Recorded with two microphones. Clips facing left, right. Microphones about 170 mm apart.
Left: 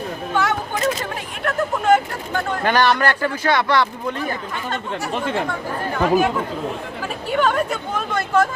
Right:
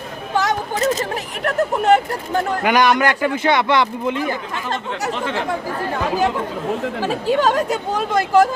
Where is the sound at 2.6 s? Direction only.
15° right (ahead or behind).